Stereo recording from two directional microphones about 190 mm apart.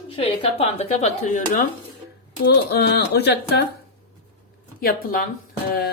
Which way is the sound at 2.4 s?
60° left (ahead or behind).